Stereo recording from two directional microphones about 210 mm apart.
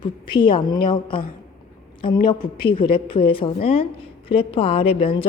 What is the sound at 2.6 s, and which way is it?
Speech, 25° left (ahead or behind).